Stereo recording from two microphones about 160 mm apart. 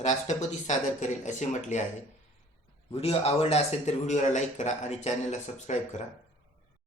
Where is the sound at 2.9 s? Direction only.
40° left (ahead or behind).